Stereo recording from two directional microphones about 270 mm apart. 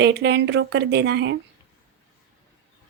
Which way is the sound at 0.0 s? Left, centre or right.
Right.